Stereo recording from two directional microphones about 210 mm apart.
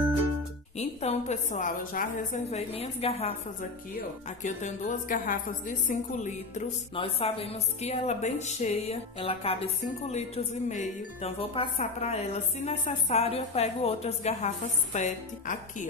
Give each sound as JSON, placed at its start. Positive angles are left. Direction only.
{"t": 0.7, "sound": "speech", "side_deg": 30}
{"t": 4.4, "sound": "speech", "side_deg": 35}